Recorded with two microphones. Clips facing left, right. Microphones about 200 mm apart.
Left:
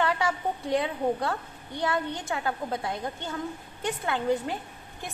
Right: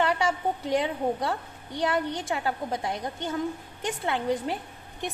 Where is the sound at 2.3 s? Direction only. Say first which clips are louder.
Even; 20° right (ahead or behind).